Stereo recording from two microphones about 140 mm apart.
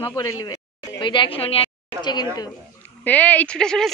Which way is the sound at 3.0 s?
10° left (ahead or behind).